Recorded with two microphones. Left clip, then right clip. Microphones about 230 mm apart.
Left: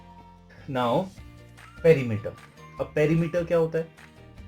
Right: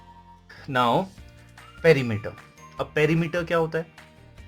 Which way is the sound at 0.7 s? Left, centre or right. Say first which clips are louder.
Right 4 dB; right.